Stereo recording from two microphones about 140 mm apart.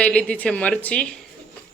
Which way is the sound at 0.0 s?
10° left (ahead or behind).